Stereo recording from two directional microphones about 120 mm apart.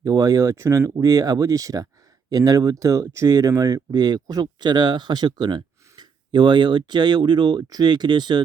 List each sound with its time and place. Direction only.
0.0 s speech: 30° right (ahead or behind)